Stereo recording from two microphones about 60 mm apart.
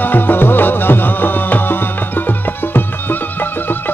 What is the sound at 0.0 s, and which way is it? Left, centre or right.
Music, left.